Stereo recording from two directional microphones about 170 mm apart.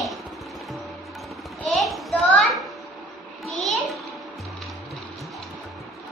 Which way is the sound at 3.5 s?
Centre (ahead or behind).